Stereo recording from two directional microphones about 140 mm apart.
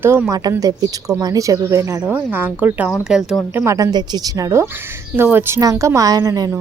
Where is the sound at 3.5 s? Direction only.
20° right (ahead or behind).